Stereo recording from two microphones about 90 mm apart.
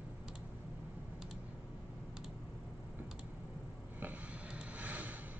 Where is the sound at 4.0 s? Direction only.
15° right (ahead or behind).